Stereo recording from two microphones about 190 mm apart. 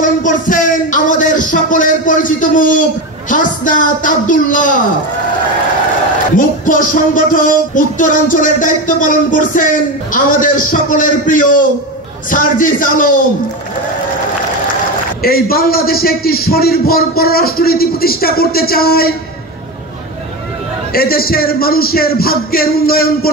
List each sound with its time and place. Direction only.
0.0 s speech: 45° left (ahead or behind)
6.3 s speech: 45° left (ahead or behind)
15.2 s speech: 50° left (ahead or behind)
20.9 s speech: 50° left (ahead or behind)